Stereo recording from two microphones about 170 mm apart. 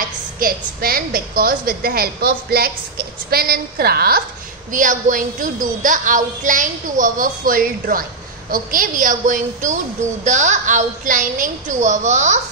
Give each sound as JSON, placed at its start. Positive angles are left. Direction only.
{"t": 0.4, "sound": "a woman's voice", "side_deg": -60}
{"t": 4.7, "sound": "a woman's voice", "side_deg": -50}